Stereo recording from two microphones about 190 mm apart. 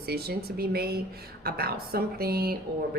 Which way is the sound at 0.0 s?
55° right (ahead or behind).